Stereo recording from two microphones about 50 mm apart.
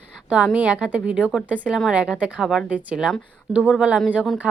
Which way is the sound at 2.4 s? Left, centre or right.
Centre.